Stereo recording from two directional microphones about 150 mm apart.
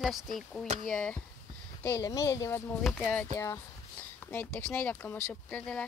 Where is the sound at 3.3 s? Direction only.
20° left (ahead or behind).